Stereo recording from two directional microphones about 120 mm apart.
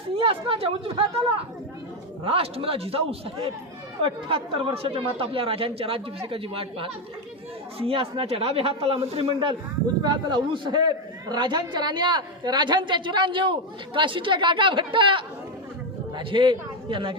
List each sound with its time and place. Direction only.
0.2 s speech: 50° right (ahead or behind)
2.2 s speech: 50° right (ahead or behind)
10.0 s a man's voice: 35° right (ahead or behind)